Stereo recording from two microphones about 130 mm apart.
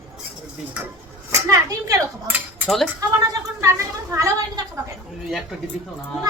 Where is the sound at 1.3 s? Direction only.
25° right (ahead or behind).